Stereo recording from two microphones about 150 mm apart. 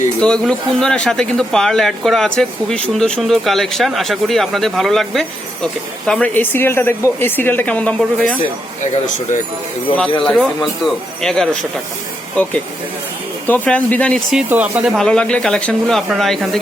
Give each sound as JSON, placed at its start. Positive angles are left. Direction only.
{"t": 0.2, "sound": "a woman's voice", "side_deg": 5}
{"t": 8.8, "sound": "speech", "side_deg": 55}
{"t": 10.2, "sound": "a woman's voice", "side_deg": 0}
{"t": 14.3, "sound": "speech", "side_deg": -10}
{"t": 14.9, "sound": "speech", "side_deg": 5}